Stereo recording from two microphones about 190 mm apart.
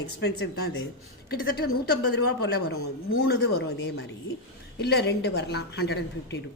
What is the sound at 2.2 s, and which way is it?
Speech, 60° left (ahead or behind).